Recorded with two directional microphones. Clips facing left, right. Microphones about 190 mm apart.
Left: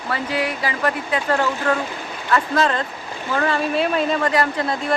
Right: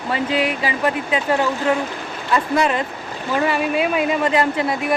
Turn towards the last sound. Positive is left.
turn(degrees=-15)  # may be behind; listen again after turning